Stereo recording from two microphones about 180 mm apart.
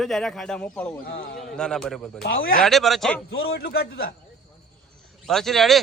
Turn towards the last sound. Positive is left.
turn(degrees=0)  # may be behind; listen again after turning